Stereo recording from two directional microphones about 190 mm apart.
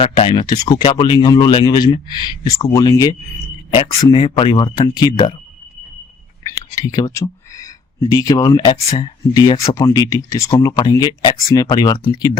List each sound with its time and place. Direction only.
0.0 s speech: 25° left (ahead or behind)
6.4 s whispering: 20° left (ahead or behind)
8.1 s speech: 20° left (ahead or behind)